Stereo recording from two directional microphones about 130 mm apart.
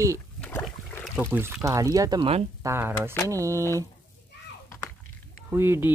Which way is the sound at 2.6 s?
20° right (ahead or behind).